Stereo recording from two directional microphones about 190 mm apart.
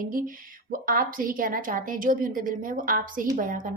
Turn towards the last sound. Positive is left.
turn(degrees=-45)  # may be behind; listen again after turning